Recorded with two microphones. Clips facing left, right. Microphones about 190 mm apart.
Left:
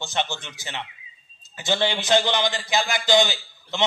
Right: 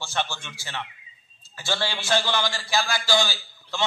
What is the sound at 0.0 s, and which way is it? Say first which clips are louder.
A man's voice: left 2 dB; 20° left (ahead or behind).